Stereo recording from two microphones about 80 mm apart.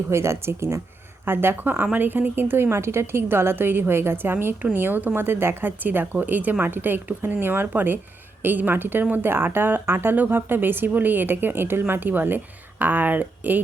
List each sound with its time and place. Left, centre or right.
0.1 s a woman's voice: right